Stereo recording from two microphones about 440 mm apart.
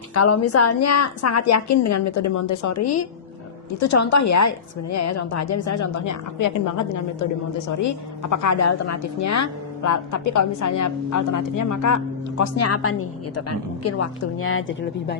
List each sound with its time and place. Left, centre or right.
0.1 s a woman's voice: left